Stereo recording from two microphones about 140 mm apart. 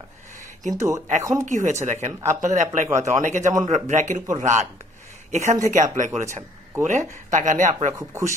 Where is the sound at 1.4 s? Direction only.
60° right (ahead or behind).